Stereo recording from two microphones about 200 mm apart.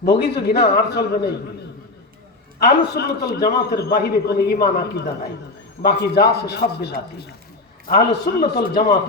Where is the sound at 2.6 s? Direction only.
55° left (ahead or behind).